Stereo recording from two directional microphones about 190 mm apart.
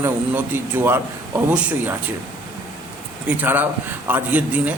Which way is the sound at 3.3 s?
10° right (ahead or behind).